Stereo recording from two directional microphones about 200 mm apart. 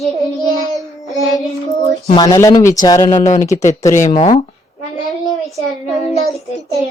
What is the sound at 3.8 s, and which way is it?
Speech, 15° left (ahead or behind).